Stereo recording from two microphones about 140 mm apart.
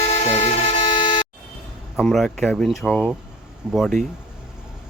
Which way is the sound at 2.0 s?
Centre (ahead or behind).